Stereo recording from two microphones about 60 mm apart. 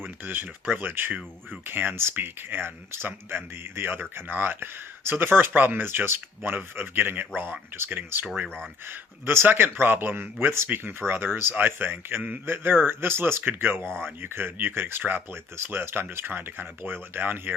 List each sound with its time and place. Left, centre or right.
0.4 s speech: right
0.8 s speech: right
8.9 s speech: right